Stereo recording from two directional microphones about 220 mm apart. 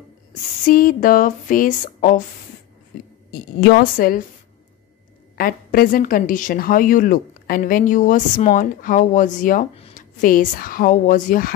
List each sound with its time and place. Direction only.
0.3 s a woman's voice: 40° left (ahead or behind)
3.6 s a woman's voice: 45° left (ahead or behind)
5.4 s a woman's voice: 40° left (ahead or behind)